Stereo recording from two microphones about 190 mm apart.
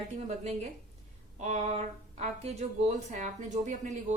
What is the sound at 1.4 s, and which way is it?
A woman's voice, 35° right (ahead or behind).